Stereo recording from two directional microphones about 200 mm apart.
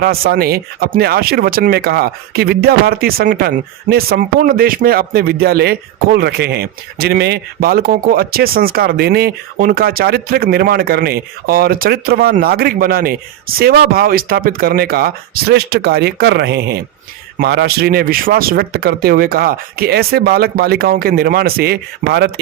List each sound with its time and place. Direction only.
0.0 s speech: 50° right (ahead or behind)